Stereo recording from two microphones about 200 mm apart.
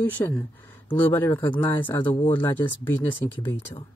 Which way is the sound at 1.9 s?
10° left (ahead or behind).